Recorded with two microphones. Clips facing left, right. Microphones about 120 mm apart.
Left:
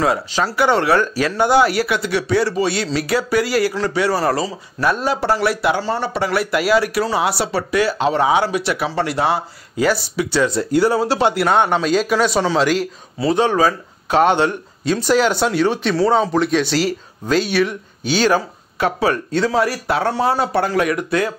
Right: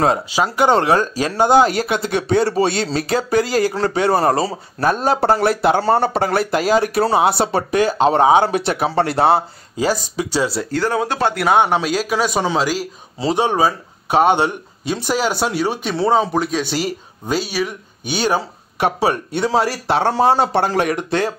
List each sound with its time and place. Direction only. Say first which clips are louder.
0.3 s speech: right 1 dB; 15° right (ahead or behind)
4.8 s speech: right 2 dB; 40° right (ahead or behind)
5.8 s speech: right 5 dB; 55° right (ahead or behind)
6.9 s speech: right 3 dB; 30° right (ahead or behind)
7.5 s speech: right 2 dB; 45° right (ahead or behind)
8.8 s speech: right 3 dB; 35° right (ahead or behind)
10.7 s speech: left 4 dB; 10° left (ahead or behind)
11.4 s speech: right 1 dB; 10° right (ahead or behind)
13.2 s speech: left 1 dB; 20° right (ahead or behind)